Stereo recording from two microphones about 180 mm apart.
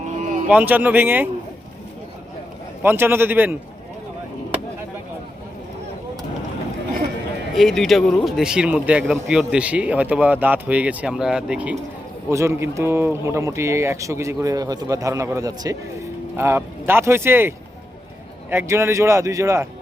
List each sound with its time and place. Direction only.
0.1 s a sound: 40° right (ahead or behind)
0.4 s speech: 10° right (ahead or behind)
2.8 s speech: 10° right (ahead or behind)
7.5 s speech: centre (ahead or behind)
12.3 s speech: 15° right (ahead or behind)
18.5 s speech: 15° right (ahead or behind)